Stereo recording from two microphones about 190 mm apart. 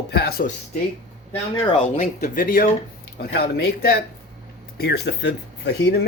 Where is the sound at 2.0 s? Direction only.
45° left (ahead or behind).